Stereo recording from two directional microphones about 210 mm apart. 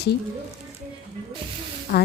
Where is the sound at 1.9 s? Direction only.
40° left (ahead or behind).